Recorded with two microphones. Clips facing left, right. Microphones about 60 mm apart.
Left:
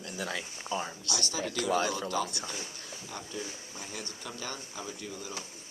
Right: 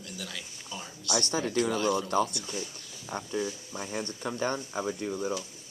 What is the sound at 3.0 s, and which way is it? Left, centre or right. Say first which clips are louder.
Speech: right 8 dB; right.